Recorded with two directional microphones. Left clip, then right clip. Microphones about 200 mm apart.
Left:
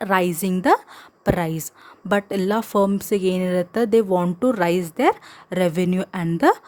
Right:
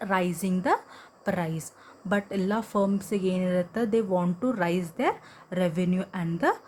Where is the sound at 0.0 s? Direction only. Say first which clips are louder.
Left 7 dB; 55° left (ahead or behind).